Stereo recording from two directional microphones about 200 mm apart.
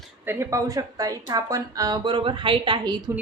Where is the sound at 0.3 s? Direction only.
15° right (ahead or behind).